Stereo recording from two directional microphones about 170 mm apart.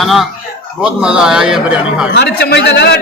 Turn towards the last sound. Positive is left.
turn(degrees=75)  # may be behind; listen again after turning